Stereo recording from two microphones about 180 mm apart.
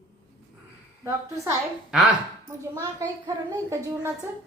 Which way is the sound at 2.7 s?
20° right (ahead or behind).